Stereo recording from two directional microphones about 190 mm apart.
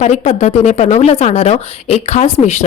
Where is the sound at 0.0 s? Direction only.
35° left (ahead or behind).